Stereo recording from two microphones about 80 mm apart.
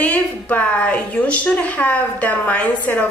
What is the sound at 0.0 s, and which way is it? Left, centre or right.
A woman's voice, centre.